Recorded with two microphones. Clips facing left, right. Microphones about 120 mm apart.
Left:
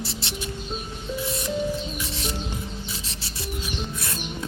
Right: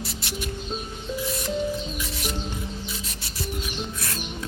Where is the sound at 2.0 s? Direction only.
30° left (ahead or behind).